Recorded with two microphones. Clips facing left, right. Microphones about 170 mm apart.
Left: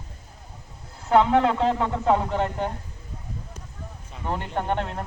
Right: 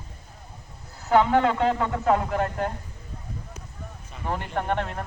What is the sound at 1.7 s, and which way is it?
Speech, 20° left (ahead or behind).